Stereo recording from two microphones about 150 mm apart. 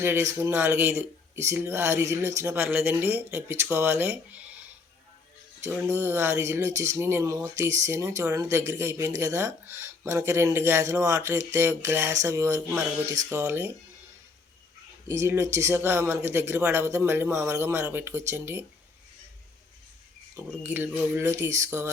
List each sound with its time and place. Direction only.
0.0 s speech: 15° right (ahead or behind)
5.7 s speech: 15° right (ahead or behind)
15.0 s speech: 20° right (ahead or behind)
20.3 s speech: 15° right (ahead or behind)